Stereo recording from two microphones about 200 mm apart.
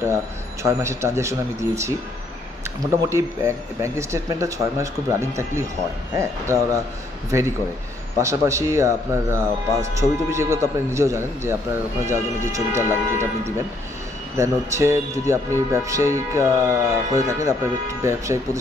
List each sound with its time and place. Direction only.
0.0 s speech: 15° right (ahead or behind)
3.0 s speech: 15° right (ahead or behind)
14.3 s speech: 15° right (ahead or behind)